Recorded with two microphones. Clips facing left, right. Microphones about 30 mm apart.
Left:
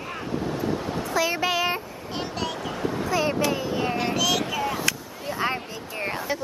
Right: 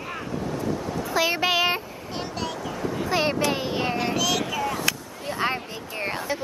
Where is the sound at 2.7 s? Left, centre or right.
Centre.